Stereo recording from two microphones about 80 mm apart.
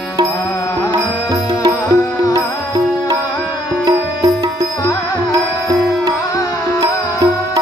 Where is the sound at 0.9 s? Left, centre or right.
Right.